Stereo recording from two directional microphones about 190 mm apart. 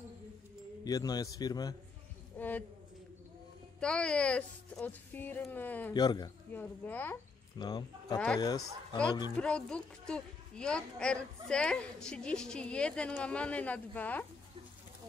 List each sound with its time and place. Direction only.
0.8 s a man's voice: 20° left (ahead or behind)
2.3 s a man's voice: 10° left (ahead or behind)
3.8 s speech: 5° left (ahead or behind)
5.9 s a man's voice: 20° left (ahead or behind)
6.5 s speech: 10° left (ahead or behind)
7.5 s a man's voice: 20° left (ahead or behind)
8.5 s a woman's voice: 5° left (ahead or behind)